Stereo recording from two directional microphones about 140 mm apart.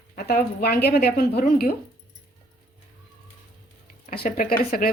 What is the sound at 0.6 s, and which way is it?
Speech, 90° left.